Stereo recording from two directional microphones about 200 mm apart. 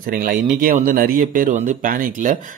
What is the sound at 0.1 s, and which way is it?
Speech, 45° right (ahead or behind).